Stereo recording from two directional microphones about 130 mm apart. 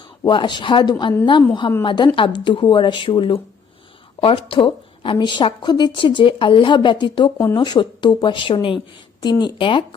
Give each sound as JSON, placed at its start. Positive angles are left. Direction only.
{"t": 0.0, "sound": "speech", "side_deg": 35}